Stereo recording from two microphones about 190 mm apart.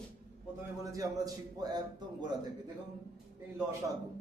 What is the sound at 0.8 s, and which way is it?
A man's voice, 15° right (ahead or behind).